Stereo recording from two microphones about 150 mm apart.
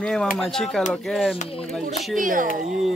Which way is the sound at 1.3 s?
40° left (ahead or behind).